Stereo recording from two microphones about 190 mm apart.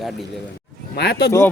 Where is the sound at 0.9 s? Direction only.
60° left (ahead or behind).